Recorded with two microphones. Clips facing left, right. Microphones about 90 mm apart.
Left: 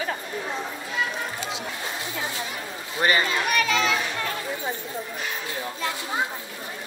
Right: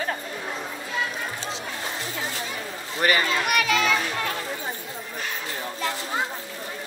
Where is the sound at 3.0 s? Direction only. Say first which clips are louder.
Even; 30° left (ahead or behind).